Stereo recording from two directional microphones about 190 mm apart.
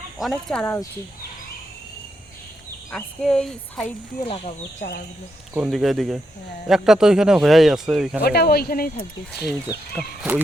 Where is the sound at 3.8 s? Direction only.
30° left (ahead or behind).